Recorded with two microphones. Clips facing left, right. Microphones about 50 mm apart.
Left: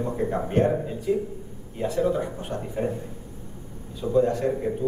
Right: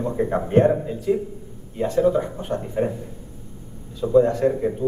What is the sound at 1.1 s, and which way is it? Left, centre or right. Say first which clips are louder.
Speech: right 3 dB; centre.